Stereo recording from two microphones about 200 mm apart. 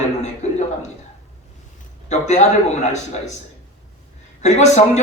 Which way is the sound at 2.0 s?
35° left (ahead or behind).